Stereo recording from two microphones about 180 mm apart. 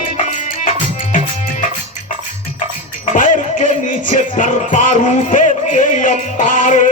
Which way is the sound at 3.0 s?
45° left (ahead or behind).